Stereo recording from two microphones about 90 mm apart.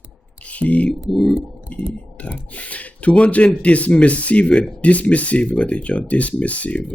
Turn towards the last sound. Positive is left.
turn(degrees=15)  # may be behind; listen again after turning